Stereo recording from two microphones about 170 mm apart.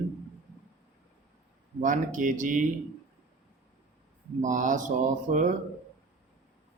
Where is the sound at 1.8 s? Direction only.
50° right (ahead or behind).